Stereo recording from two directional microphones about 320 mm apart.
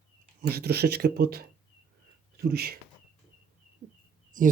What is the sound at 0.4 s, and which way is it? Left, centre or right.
Speech, right.